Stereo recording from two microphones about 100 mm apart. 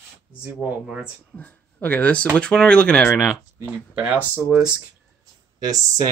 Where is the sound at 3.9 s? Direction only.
15° right (ahead or behind).